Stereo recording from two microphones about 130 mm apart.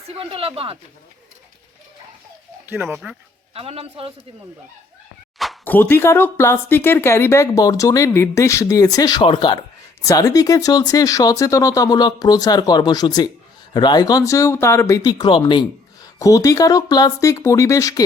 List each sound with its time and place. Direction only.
0.1 s a woman's voice: 45° right (ahead or behind)
2.6 s speech: 15° right (ahead or behind)
3.5 s a woman's voice: 50° right (ahead or behind)
5.6 s speech: 15° left (ahead or behind); by 9.6 s 35° left (ahead or behind)
10.0 s speech: 25° left (ahead or behind)